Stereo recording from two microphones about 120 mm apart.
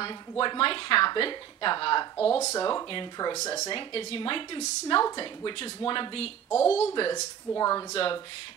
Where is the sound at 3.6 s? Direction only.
45° left (ahead or behind).